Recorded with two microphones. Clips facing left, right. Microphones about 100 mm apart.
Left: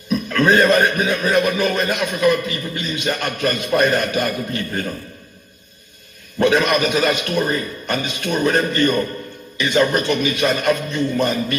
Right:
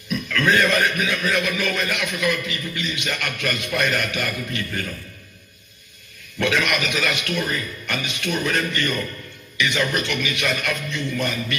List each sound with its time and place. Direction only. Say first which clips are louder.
0.1 s a man's voice: left 5 dB; 30° left (ahead or behind)
6.4 s a man's voice: left 6 dB; 35° left (ahead or behind)